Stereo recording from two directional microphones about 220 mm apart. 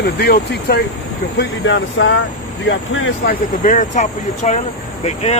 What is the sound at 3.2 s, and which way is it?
Speech, 40° left (ahead or behind).